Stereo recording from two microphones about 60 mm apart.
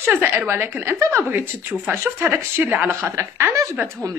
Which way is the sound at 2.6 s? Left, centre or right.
Right.